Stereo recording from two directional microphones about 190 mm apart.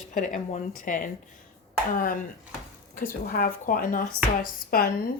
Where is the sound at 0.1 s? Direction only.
45° left (ahead or behind).